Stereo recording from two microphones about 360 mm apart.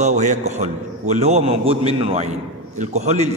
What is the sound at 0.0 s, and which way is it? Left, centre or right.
A man's voice, centre.